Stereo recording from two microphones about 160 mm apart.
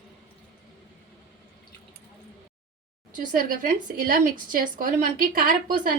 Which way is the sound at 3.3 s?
60° right (ahead or behind).